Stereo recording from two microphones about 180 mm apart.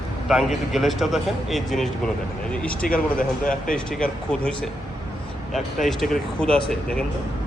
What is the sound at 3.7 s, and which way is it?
Speech, 5° left (ahead or behind).